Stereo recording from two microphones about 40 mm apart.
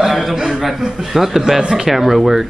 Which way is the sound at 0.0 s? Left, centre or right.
Centre.